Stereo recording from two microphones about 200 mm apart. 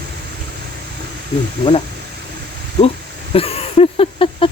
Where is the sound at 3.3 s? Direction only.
30° left (ahead or behind).